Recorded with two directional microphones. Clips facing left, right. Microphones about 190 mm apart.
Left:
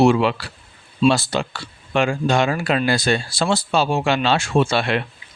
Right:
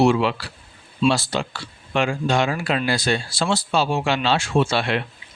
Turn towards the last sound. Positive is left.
turn(degrees=55)  # may be behind; listen again after turning